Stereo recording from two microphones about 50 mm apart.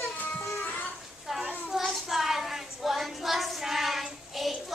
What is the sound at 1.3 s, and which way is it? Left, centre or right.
Child singing, centre.